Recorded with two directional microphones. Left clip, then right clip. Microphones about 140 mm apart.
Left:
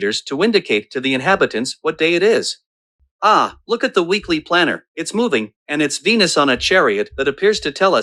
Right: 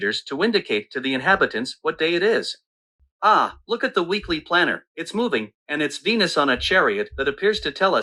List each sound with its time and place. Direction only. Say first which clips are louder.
0.0 s speech: left 4 dB; 35° left (ahead or behind)